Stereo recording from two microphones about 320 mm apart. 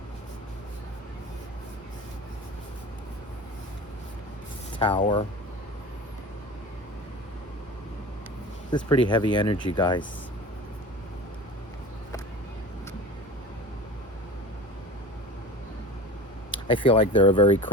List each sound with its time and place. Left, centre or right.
4.8 s speech: centre
8.7 s speech: centre
16.6 s speech: centre